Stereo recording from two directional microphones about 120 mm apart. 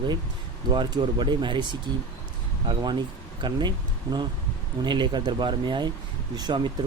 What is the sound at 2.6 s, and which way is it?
Speech, 40° right (ahead or behind).